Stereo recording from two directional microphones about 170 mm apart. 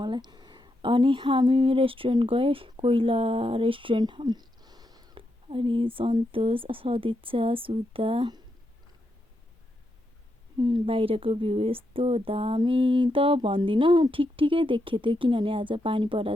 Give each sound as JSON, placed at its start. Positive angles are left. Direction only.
{"t": 0.0, "sound": "speech", "side_deg": -25}
{"t": 10.6, "sound": "speech", "side_deg": -25}